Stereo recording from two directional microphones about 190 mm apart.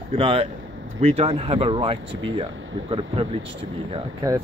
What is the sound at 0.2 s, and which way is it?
Speech, 30° right (ahead or behind).